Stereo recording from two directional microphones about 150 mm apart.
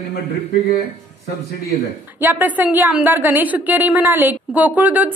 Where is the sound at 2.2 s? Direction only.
15° right (ahead or behind).